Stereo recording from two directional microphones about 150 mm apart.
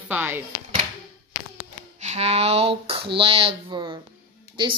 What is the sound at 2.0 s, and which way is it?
Speech, 45° right (ahead or behind).